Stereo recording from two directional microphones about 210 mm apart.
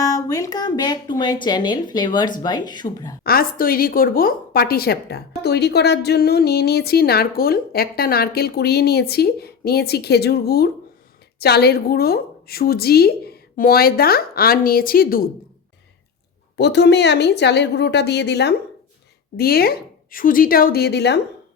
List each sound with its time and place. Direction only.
0.0 s a woman's voice: 15° left (ahead or behind)
3.2 s a woman's voice: 45° left (ahead or behind)
16.6 s a woman's voice: 55° left (ahead or behind)